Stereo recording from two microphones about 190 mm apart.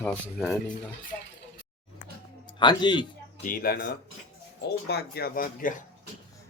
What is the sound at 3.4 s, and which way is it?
Speech, 50° left (ahead or behind).